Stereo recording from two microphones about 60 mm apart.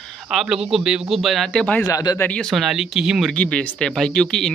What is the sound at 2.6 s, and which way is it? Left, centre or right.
Speech, centre.